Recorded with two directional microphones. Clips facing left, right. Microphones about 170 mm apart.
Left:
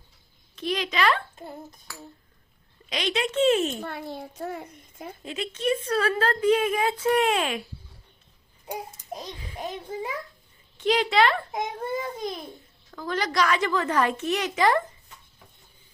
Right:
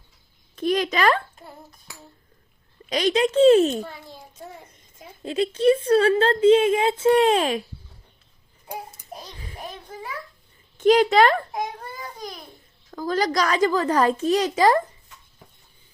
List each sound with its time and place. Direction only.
0.5 s a woman's voice: 45° right (ahead or behind)
2.9 s a child's voice: 40° right (ahead or behind)
3.8 s a child's voice: 65° left (ahead or behind)
5.2 s a woman's voice: 35° right (ahead or behind)
8.6 s babbling: 20° left (ahead or behind)
9.6 s a child's voice: 20° left (ahead or behind)
10.8 s a woman's voice: 45° right (ahead or behind)
12.9 s a child's voice: 35° right (ahead or behind)